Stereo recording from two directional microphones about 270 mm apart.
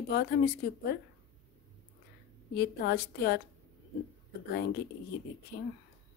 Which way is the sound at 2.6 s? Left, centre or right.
Left.